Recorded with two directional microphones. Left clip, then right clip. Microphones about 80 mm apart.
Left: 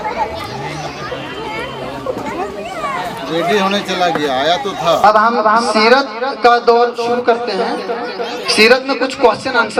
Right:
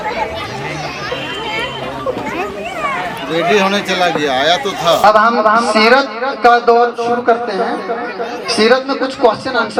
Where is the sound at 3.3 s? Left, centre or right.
Centre.